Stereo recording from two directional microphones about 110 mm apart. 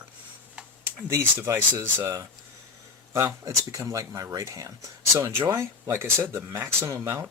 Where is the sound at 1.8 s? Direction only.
25° right (ahead or behind).